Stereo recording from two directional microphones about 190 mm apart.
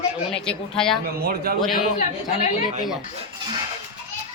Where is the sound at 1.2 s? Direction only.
55° right (ahead or behind).